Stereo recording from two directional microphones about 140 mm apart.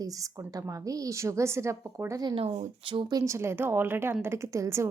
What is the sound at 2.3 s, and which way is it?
Speech, 40° right (ahead or behind).